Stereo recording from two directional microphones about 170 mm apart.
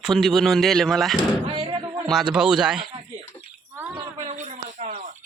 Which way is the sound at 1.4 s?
30° right (ahead or behind).